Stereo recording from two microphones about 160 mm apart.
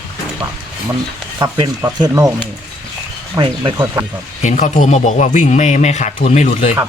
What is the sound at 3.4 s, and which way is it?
Speech, 30° right (ahead or behind).